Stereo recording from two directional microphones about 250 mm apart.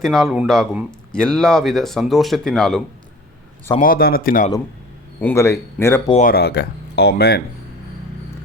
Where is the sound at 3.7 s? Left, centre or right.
Left.